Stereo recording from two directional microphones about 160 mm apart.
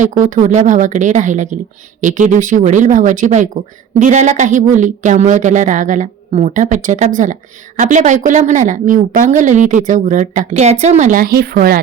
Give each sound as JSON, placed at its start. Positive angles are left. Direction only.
{"t": 0.0, "sound": "a woman's voice", "side_deg": -50}